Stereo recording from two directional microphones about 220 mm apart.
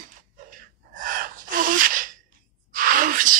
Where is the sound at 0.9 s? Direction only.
40° right (ahead or behind).